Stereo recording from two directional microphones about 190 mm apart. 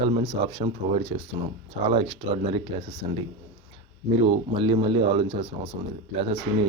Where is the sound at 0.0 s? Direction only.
30° right (ahead or behind).